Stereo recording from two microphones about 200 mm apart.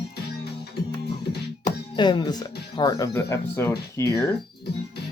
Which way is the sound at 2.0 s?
20° left (ahead or behind).